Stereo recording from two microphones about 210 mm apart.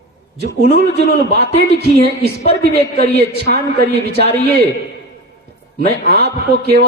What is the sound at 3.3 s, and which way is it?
Speech, 50° right (ahead or behind).